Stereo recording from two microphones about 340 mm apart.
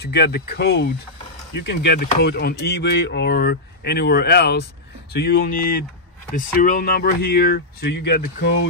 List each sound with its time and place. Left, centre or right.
0.0 s speech: left